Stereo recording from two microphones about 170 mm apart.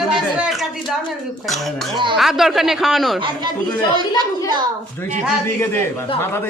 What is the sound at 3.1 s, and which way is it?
Speech, 30° right (ahead or behind).